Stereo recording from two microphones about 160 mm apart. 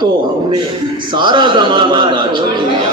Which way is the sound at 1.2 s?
30° right (ahead or behind).